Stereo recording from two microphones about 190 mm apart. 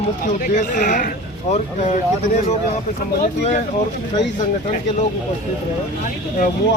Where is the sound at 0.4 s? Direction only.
40° left (ahead or behind).